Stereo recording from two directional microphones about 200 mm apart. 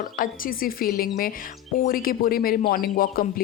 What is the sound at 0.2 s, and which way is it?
Speech, 45° left (ahead or behind).